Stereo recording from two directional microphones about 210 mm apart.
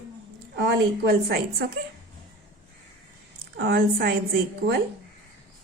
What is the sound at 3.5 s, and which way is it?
Speech, 50° right (ahead or behind).